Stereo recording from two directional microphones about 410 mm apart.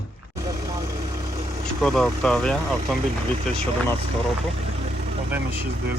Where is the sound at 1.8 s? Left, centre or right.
Centre.